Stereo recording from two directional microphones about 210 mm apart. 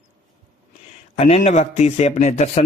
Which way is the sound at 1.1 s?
30° left (ahead or behind).